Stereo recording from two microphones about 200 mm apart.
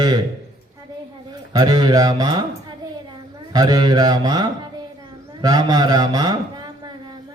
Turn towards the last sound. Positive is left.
turn(degrees=-20)  # may be behind; listen again after turning